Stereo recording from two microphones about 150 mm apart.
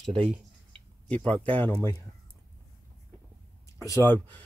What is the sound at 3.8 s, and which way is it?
Speech, 20° left (ahead or behind).